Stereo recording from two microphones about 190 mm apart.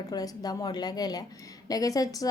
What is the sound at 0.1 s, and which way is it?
Speech, 20° left (ahead or behind).